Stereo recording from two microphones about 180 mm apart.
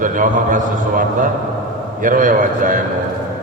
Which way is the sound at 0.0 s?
45° right (ahead or behind).